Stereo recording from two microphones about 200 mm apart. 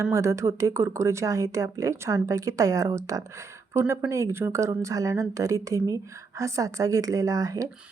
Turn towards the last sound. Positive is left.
turn(degrees=-15)  # may be behind; listen again after turning